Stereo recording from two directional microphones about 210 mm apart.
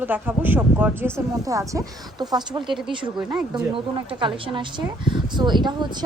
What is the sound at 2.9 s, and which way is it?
A woman's voice, 25° right (ahead or behind).